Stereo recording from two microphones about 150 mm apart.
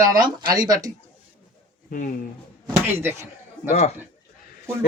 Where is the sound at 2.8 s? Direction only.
15° right (ahead or behind).